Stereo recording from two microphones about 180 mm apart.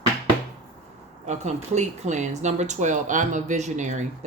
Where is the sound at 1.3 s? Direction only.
40° right (ahead or behind).